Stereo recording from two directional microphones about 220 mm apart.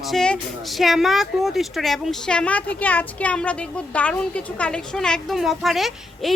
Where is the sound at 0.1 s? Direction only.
Centre (ahead or behind).